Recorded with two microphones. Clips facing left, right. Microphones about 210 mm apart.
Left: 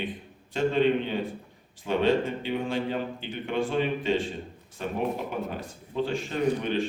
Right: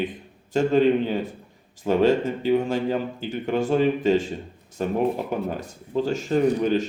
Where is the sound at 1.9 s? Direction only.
40° right (ahead or behind).